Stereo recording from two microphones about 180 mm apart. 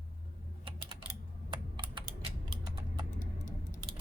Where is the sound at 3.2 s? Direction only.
45° left (ahead or behind).